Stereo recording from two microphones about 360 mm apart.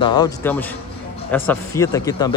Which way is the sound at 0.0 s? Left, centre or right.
Centre.